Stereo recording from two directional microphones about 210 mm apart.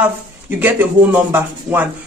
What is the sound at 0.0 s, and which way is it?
Speech, 10° right (ahead or behind).